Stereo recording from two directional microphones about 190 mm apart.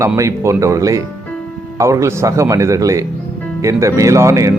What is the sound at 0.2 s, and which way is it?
Speech, 15° right (ahead or behind).